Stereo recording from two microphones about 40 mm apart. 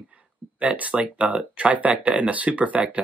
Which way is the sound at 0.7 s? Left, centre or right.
Right.